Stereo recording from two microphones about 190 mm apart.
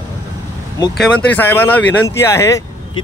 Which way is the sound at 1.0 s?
10° left (ahead or behind).